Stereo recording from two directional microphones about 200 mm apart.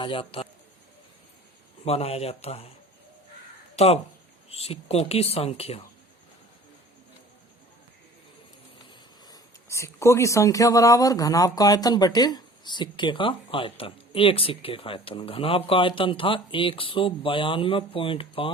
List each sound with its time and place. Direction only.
0.0 s speech: 25° left (ahead or behind)
1.8 s speech: 30° left (ahead or behind)
3.8 s speech: 30° left (ahead or behind)
8.9 s speech: 20° left (ahead or behind)